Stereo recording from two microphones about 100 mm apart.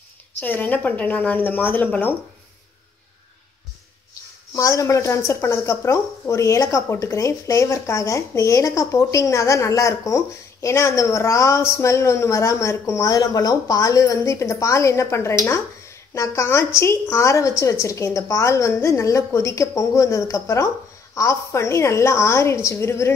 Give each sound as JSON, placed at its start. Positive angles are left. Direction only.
{"t": 0.4, "sound": "a woman's voice", "side_deg": 15}
{"t": 4.1, "sound": "a woman's voice", "side_deg": 35}